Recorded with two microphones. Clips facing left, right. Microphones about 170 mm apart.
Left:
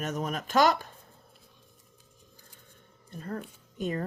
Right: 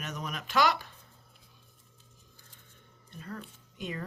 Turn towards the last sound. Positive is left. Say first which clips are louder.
# left 7 dB
turn(degrees=45)  # may be behind; listen again after turning